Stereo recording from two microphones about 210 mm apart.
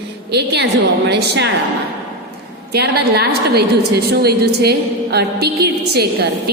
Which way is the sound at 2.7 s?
50° right (ahead or behind).